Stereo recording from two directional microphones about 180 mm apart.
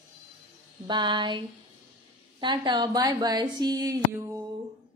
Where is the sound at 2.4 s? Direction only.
25° right (ahead or behind).